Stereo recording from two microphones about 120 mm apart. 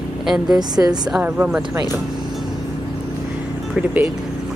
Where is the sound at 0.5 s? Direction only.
35° right (ahead or behind).